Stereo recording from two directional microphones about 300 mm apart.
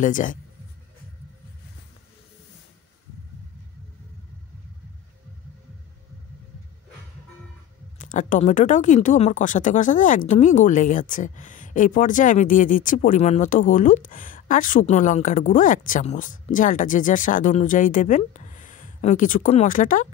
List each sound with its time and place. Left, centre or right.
0.0 s speech: left
8.0 s speech: left